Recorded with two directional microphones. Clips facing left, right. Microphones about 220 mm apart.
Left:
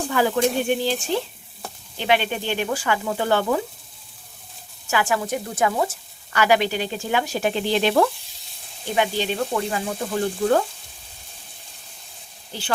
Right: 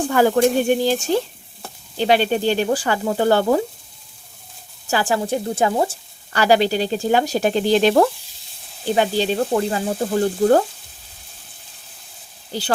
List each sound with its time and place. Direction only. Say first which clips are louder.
0.1 s speech: right 5 dB; 45° right (ahead or behind)
4.9 s speech: right 3 dB; 35° right (ahead or behind)